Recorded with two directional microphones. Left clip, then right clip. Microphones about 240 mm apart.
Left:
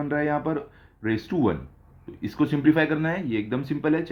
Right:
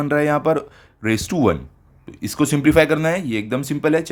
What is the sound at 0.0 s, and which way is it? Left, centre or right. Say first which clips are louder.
Speech: right 8 dB; right.